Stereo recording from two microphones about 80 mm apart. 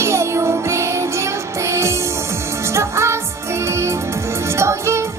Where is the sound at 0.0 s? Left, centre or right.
Right.